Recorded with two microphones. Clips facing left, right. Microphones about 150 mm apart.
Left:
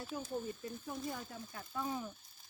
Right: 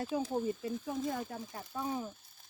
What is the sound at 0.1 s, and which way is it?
Speech, 90° right.